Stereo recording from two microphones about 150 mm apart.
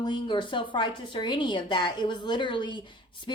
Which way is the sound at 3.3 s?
30° left (ahead or behind).